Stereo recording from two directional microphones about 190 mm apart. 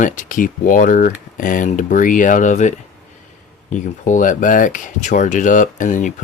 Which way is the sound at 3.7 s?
40° left (ahead or behind).